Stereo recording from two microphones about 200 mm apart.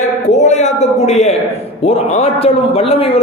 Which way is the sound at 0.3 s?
35° left (ahead or behind).